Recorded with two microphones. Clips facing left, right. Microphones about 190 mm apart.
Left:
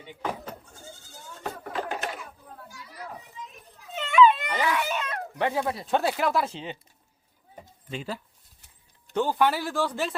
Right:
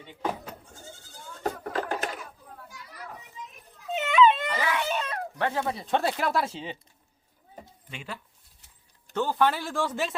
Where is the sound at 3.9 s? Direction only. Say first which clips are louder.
Left 1 dB; 20° right (ahead or behind).